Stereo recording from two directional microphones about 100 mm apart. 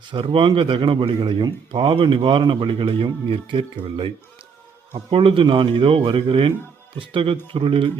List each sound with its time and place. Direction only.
0.1 s speech: 55° right (ahead or behind)
5.1 s speech: 65° right (ahead or behind)